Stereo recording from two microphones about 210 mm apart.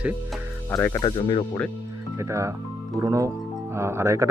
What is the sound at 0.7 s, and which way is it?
Speech, 10° left (ahead or behind).